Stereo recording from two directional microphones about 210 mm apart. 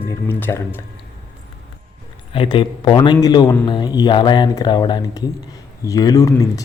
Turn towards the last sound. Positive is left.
turn(degrees=15)  # may be behind; listen again after turning